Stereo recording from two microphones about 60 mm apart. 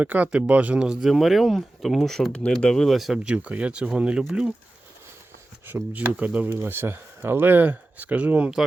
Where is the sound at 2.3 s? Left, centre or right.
Centre.